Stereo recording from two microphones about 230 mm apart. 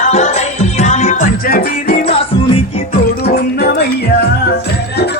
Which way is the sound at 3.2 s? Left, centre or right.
Left.